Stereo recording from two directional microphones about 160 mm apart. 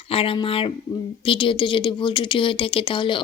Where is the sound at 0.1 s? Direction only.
35° left (ahead or behind).